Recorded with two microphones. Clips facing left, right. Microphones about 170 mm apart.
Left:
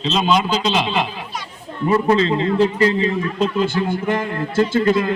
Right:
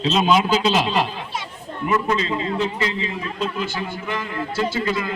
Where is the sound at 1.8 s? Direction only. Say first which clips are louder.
Left 6 dB; 35° left (ahead or behind).